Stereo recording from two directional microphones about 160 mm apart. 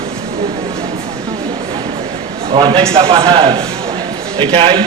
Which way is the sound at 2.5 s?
30° right (ahead or behind).